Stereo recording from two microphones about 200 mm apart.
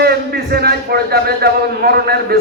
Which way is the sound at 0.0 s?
50° right (ahead or behind).